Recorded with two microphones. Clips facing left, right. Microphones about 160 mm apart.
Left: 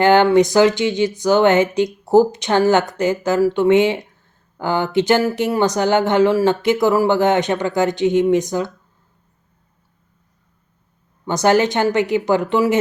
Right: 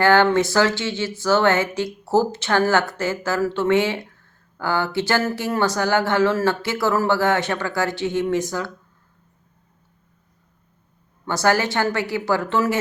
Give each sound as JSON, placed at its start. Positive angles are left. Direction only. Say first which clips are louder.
{"t": 0.0, "sound": "speech", "louder": "left 4 dB", "side_deg": 20}
{"t": 11.3, "sound": "speech", "louder": "left 5 dB", "side_deg": 20}